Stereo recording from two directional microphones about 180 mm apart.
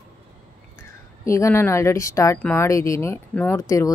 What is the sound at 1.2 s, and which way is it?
A woman's voice, 15° left (ahead or behind).